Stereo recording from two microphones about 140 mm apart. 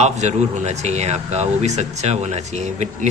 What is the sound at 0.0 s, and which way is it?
Speech, 55° right (ahead or behind).